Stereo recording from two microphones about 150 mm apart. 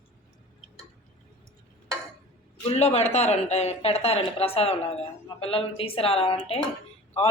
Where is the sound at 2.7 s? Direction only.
45° left (ahead or behind).